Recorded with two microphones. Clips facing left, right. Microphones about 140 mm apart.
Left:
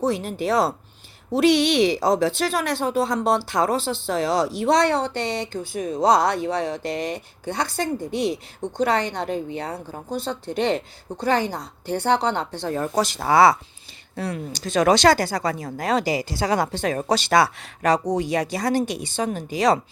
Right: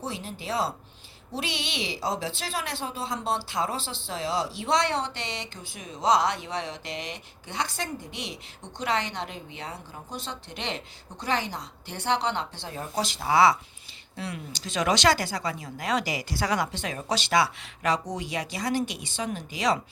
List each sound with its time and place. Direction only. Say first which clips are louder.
0.1 s a woman's voice: left 10 dB; 60° left (ahead or behind); by 4.4 s 80° left
4.6 s a woman's voice: left 6 dB; 40° left (ahead or behind)
12.6 s a woman's voice: left 11 dB; 55° left (ahead or behind)
16.1 s a woman's voice: left 5 dB; 25° left (ahead or behind)